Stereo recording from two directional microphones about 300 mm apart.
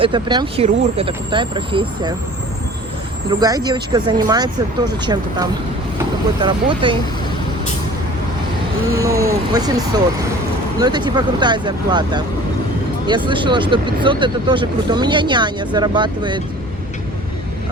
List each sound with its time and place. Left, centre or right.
0.0 s speech: centre
3.2 s speech: centre
9.0 s speech: centre